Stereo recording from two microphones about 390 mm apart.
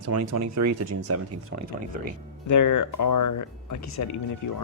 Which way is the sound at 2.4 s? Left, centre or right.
Left.